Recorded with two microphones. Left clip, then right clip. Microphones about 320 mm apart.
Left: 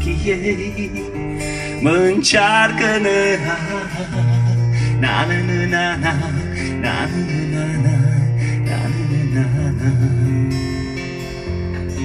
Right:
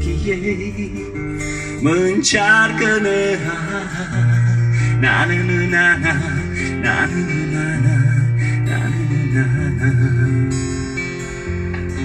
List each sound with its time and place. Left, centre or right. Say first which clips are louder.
1.9 s music: left 1 dB; left
5.0 s music: right 2 dB; centre